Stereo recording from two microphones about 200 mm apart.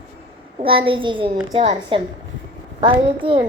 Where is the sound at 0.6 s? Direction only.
25° right (ahead or behind).